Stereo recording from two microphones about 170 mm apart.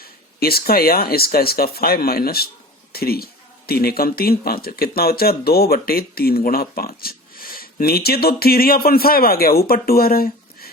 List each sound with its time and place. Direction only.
0.0 s speech: 65° left (ahead or behind)